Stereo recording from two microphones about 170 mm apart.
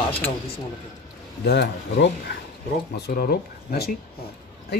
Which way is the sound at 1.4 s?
75° left (ahead or behind).